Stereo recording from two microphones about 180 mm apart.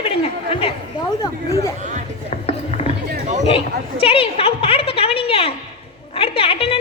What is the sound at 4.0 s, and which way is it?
A woman's voice, 30° left (ahead or behind).